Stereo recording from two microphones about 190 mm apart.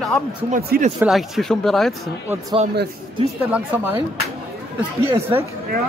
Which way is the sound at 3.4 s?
10° right (ahead or behind).